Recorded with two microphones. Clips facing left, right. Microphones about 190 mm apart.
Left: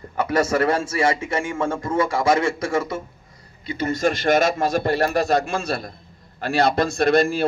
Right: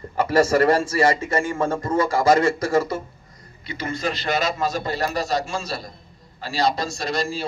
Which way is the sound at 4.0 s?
50° left (ahead or behind).